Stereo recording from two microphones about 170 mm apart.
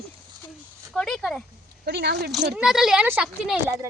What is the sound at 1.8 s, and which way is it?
Speech, 75° right (ahead or behind).